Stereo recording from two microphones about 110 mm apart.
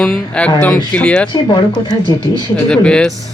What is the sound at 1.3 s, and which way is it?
Speech, 45° left (ahead or behind).